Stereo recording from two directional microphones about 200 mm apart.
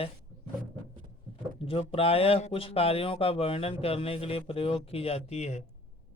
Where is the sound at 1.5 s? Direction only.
30° left (ahead or behind).